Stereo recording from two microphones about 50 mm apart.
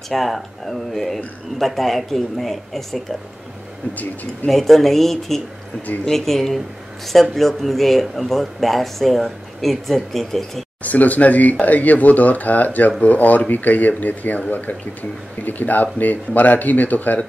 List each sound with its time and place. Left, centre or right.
0.1 s speech: centre
3.9 s speech: left
4.5 s speech: centre
10.8 s speech: left
15.4 s speech: left